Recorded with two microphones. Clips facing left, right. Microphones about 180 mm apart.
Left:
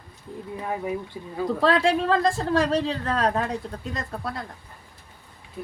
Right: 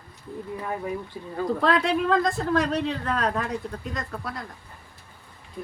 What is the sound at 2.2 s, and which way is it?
A woman's voice, 30° left (ahead or behind).